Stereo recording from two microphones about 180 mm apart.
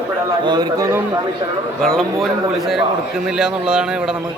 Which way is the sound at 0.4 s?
25° right (ahead or behind).